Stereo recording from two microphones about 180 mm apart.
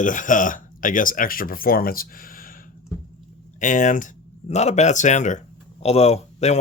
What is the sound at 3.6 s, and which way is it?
Speech, 45° left (ahead or behind).